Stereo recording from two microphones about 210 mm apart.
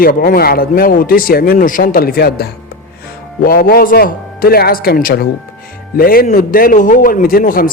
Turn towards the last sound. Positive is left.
turn(degrees=45)  # may be behind; listen again after turning